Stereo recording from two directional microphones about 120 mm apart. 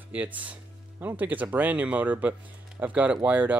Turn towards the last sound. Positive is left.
turn(degrees=-15)  # may be behind; listen again after turning